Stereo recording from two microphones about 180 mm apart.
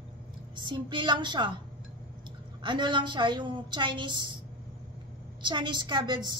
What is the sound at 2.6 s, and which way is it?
A woman's voice, 25° right (ahead or behind).